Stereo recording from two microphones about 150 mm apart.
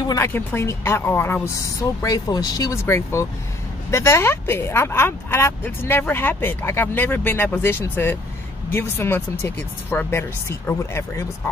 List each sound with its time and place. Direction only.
0.1 s speech: 15° left (ahead or behind)